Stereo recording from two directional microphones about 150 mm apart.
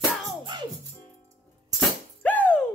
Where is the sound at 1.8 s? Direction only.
10° left (ahead or behind).